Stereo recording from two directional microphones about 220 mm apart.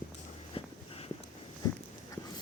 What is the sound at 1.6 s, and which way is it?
Dog, 15° left (ahead or behind).